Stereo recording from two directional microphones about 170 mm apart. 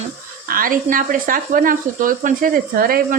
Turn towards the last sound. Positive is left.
turn(degrees=-55)  # may be behind; listen again after turning